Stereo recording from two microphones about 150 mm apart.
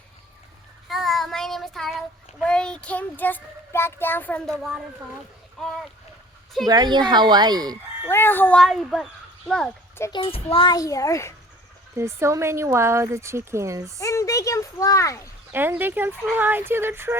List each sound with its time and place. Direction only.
0.9 s child singing: centre (ahead or behind)
6.7 s speech: 25° right (ahead or behind)
8.0 s speech: 15° left (ahead or behind)
10.1 s speech: 35° left (ahead or behind)
11.9 s speech: 15° right (ahead or behind)
14.0 s speech: 20° left (ahead or behind)
15.5 s speech: 15° right (ahead or behind)